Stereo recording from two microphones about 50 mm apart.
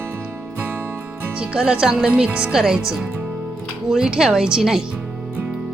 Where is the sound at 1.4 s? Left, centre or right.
Centre.